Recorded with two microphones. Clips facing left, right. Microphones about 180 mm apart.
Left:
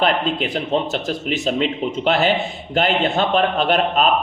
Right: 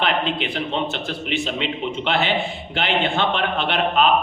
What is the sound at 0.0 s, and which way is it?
A man's voice, 40° left (ahead or behind).